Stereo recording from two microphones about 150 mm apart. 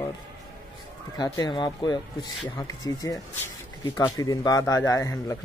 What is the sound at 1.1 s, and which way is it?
A man's voice, 25° left (ahead or behind).